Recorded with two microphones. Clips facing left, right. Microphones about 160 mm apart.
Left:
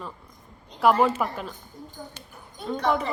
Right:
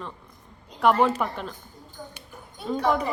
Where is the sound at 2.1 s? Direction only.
5° right (ahead or behind).